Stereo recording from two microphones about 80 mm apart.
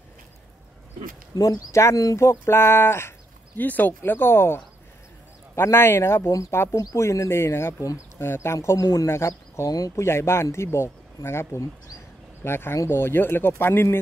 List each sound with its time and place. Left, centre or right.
1.3 s speech: left
5.6 s speech: left
9.7 s speech: left
10.0 s speech: left